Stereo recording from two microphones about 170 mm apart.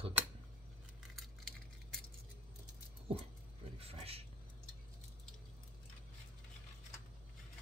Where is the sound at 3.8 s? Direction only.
35° right (ahead or behind).